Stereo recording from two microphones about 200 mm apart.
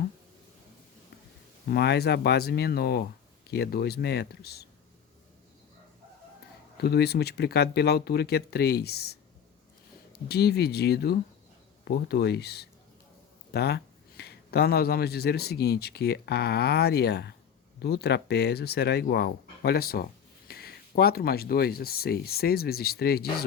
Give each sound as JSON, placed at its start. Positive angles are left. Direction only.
{"t": 1.7, "sound": "speech", "side_deg": 55}
{"t": 6.8, "sound": "speech", "side_deg": 55}